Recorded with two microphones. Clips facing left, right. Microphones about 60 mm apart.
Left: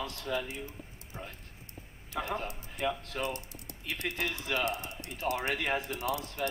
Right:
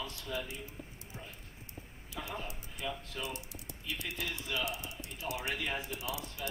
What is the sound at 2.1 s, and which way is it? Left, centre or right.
Speech, left.